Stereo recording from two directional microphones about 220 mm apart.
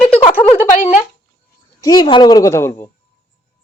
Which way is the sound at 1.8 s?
20° left (ahead or behind).